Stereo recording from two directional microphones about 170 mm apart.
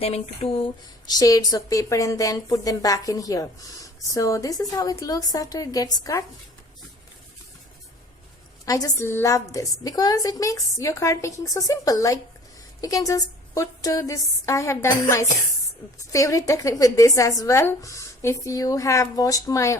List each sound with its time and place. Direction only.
0.0 s a sound: 35° left (ahead or behind)
1.0 s a woman's voice: 20° left (ahead or behind)
8.6 s a woman's voice: 20° left (ahead or behind)